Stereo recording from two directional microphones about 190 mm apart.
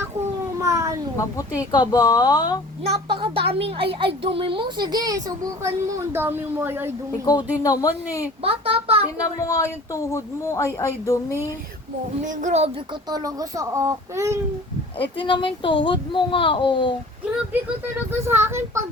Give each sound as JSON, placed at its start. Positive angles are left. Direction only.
{"t": 0.6, "sound": "a sound", "side_deg": -15}
{"t": 1.1, "sound": "a child's voice", "side_deg": 15}
{"t": 3.1, "sound": "a child's voice", "side_deg": -30}
{"t": 7.3, "sound": "a child's voice", "side_deg": 20}
{"t": 8.4, "sound": "a child's voice", "side_deg": -30}
{"t": 9.4, "sound": "speech", "side_deg": 15}
{"t": 12.2, "sound": "a child's voice", "side_deg": -40}
{"t": 13.1, "sound": "a child's voice", "side_deg": -20}
{"t": 15.2, "sound": "a child's voice", "side_deg": 25}
{"t": 18.3, "sound": "a child's voice", "side_deg": -10}